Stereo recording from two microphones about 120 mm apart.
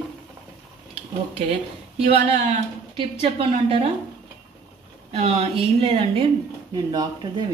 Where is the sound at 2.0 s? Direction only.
55° right (ahead or behind).